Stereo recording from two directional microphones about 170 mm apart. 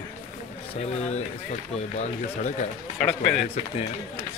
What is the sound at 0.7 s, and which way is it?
Speech, 40° left (ahead or behind).